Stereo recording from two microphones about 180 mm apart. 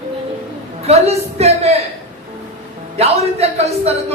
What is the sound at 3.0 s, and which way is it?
Speech, 35° right (ahead or behind).